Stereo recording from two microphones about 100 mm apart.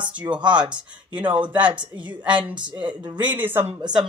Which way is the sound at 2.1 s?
50° right (ahead or behind).